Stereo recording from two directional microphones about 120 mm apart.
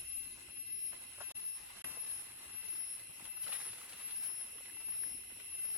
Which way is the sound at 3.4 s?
10° right (ahead or behind).